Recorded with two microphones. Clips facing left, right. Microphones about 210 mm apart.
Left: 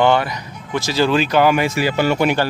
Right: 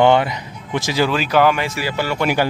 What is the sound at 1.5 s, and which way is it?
Speech, 15° left (ahead or behind).